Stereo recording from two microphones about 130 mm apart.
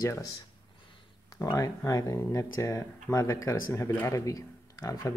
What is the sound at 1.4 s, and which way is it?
Speech, 25° left (ahead or behind).